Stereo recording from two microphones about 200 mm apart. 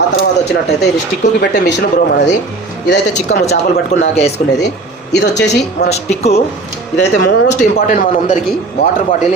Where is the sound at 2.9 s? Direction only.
55° left (ahead or behind).